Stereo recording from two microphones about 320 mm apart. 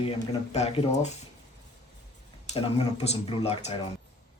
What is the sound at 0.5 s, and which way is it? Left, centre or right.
Speech, centre.